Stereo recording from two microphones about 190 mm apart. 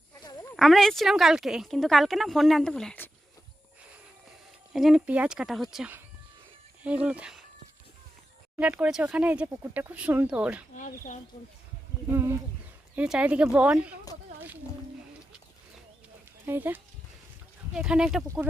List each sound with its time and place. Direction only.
0.5 s speech: centre (ahead or behind)
4.7 s speech: centre (ahead or behind)
8.5 s speech: 5° right (ahead or behind)
10.8 s speech: 40° left (ahead or behind)
12.1 s speech: 15° right (ahead or behind)
16.5 s speech: 10° right (ahead or behind)